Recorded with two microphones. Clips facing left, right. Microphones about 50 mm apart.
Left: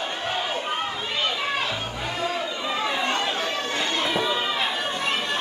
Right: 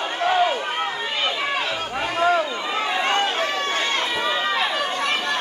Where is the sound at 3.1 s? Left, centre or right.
Right.